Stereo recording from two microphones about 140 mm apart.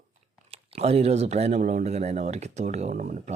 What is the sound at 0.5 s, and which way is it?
Speech, 45° right (ahead or behind).